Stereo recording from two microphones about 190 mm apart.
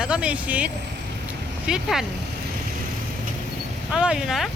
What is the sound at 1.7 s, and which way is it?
Speech, centre (ahead or behind).